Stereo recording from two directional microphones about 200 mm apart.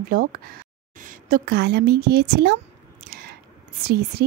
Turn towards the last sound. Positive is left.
turn(degrees=-50)  # may be behind; listen again after turning